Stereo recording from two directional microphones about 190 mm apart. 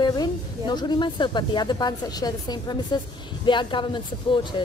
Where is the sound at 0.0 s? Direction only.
20° left (ahead or behind).